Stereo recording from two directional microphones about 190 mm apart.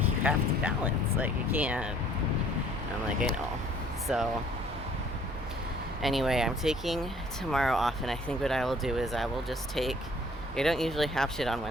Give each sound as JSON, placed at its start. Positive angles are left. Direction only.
{"t": 0.2, "sound": "speech", "side_deg": -5}
{"t": 4.1, "sound": "speech", "side_deg": -5}
{"t": 6.0, "sound": "speech", "side_deg": 0}